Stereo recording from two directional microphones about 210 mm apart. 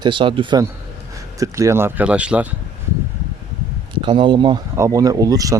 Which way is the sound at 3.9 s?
25° right (ahead or behind).